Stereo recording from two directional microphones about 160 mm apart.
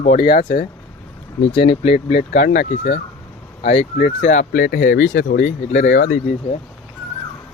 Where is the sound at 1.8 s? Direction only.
50° left (ahead or behind).